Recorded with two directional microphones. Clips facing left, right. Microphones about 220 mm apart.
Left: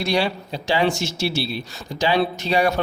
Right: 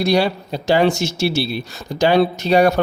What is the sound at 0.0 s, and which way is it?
A man's voice, 40° right (ahead or behind).